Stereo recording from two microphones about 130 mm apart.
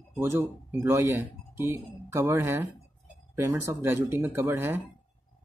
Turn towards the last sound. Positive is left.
turn(degrees=-20)  # may be behind; listen again after turning